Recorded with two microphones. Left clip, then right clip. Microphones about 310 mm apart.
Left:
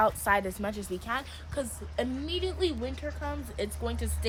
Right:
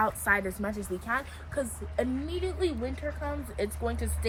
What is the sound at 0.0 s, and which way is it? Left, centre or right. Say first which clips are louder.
Speech: left 1 dB; left.